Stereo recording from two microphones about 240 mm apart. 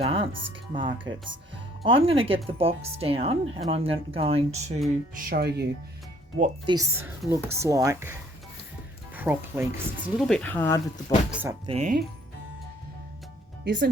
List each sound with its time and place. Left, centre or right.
0.0 s speech: right
5.3 s speech: right
6.7 s speech: centre
10.2 s speech: centre
11.3 s speech: centre
11.6 s speech: right
13.7 s speech: right